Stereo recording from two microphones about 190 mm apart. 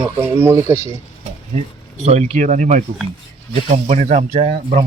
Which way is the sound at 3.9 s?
40° right (ahead or behind).